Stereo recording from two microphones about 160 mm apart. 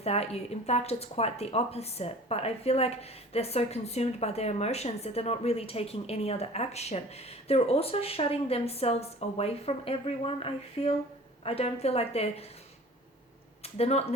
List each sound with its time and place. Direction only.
0.0 s a woman's voice: 40° left (ahead or behind)
13.6 s speech: 40° left (ahead or behind)